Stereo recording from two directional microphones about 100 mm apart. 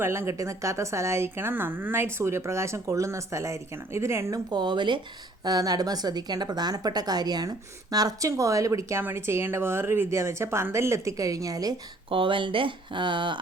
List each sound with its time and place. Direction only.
0.0 s a woman's voice: 25° right (ahead or behind)
4.5 s speech: 50° right (ahead or behind)
5.5 s speech: 40° right (ahead or behind)
12.1 s speech: 60° right (ahead or behind)